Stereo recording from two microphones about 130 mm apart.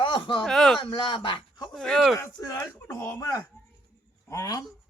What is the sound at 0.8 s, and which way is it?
Speech, 40° left (ahead or behind).